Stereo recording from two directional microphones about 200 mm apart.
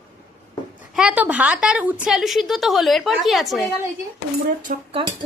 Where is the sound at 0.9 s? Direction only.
5° right (ahead or behind).